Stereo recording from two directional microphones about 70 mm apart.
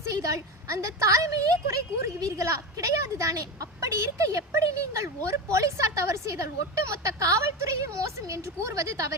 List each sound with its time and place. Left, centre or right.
0.0 s a woman's voice: right